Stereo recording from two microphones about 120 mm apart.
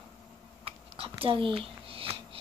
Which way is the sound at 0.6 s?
50° right (ahead or behind).